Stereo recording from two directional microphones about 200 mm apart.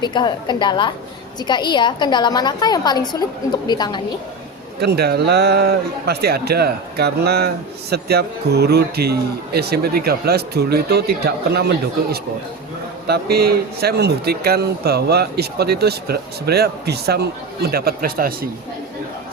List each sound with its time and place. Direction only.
0.0 s a woman's voice: 20° left (ahead or behind)
4.8 s speech: 55° right (ahead or behind)
13.1 s speech: 50° right (ahead or behind)